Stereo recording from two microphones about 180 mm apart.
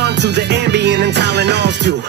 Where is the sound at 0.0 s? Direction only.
75° right (ahead or behind).